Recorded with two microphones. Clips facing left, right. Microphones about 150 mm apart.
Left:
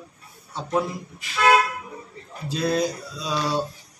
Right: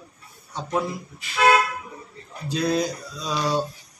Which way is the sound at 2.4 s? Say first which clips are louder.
Even; 5° left (ahead or behind).